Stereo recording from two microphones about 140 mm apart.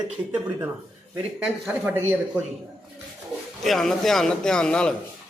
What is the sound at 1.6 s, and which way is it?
Speech, 15° right (ahead or behind).